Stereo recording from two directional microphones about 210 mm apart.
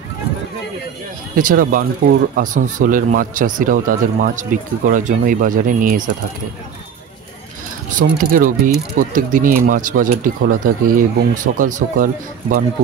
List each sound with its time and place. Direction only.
1.3 s speech: 40° right (ahead or behind)
8.0 s speech: 40° right (ahead or behind)